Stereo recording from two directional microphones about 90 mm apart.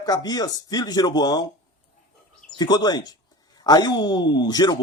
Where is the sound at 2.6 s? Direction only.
50° left (ahead or behind).